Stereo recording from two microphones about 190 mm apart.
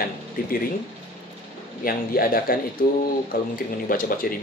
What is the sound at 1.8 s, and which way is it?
Speech, 50° left (ahead or behind).